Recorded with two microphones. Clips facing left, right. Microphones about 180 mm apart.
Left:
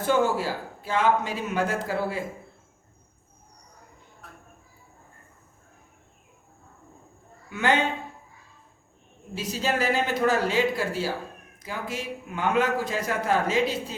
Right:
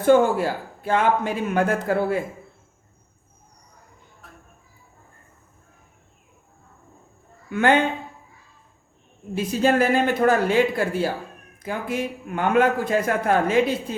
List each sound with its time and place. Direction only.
0.0 s a man's voice: 55° right (ahead or behind)
4.2 s a sound: centre (ahead or behind)
7.5 s a man's voice: 55° right (ahead or behind)
9.3 s a man's voice: 55° right (ahead or behind)